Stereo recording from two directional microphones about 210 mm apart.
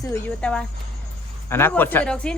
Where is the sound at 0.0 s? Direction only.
10° left (ahead or behind).